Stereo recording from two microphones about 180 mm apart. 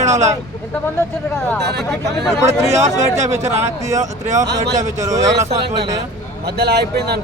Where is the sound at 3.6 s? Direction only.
15° right (ahead or behind).